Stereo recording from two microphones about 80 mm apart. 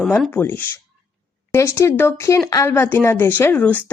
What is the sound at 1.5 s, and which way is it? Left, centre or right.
Speech, left.